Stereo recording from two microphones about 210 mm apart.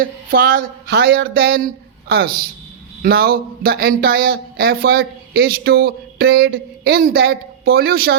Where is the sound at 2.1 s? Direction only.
45° right (ahead or behind).